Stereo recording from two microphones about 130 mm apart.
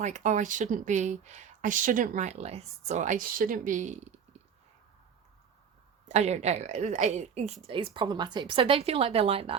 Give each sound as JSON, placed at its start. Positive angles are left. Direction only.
{"t": 0.0, "sound": "speech", "side_deg": -65}
{"t": 6.1, "sound": "a woman's voice", "side_deg": -60}